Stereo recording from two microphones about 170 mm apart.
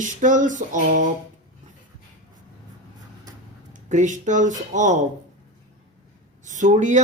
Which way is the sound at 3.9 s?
45° right (ahead or behind).